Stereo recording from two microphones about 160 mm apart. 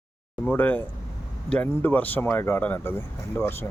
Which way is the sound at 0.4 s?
10° left (ahead or behind).